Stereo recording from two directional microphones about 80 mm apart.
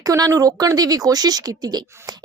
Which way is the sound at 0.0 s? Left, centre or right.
Right.